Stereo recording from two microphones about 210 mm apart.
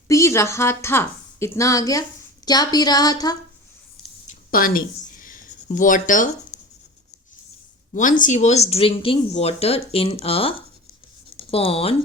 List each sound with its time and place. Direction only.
0.1 s a woman's voice: 15° left (ahead or behind)
4.3 s a sound: 40° left (ahead or behind)
7.9 s speech: 40° left (ahead or behind)